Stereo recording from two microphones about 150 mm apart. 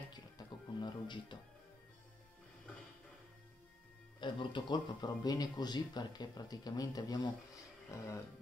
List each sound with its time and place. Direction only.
0.1 s music: 30° left (ahead or behind)
4.2 s speech: 35° left (ahead or behind)